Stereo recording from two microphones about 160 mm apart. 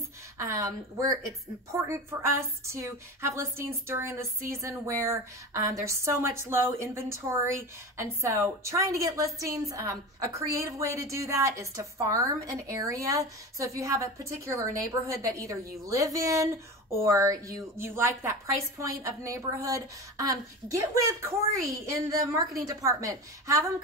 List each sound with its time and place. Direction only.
0.4 s a woman's voice: 20° right (ahead or behind)